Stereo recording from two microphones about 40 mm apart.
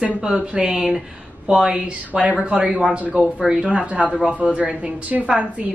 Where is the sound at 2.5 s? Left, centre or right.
Right.